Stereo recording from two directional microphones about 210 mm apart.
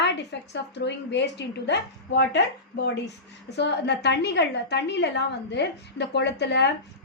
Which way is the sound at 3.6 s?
55° left (ahead or behind).